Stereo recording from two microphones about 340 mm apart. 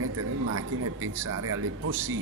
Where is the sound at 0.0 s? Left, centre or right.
Right.